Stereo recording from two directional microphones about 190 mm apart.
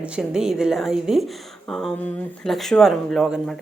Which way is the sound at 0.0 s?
5° right (ahead or behind).